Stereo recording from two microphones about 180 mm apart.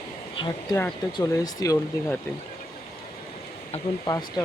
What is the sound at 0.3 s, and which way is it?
Speech, 25° left (ahead or behind).